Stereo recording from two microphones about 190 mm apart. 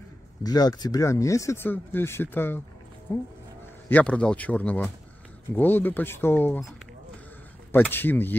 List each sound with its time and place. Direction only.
0.4 s speech: 20° left (ahead or behind)
7.9 s speech: 10° left (ahead or behind)